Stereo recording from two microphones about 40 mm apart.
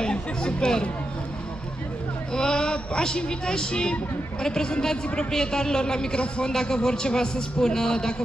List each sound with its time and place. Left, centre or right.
0.0 s speech: left
2.3 s a man's voice: left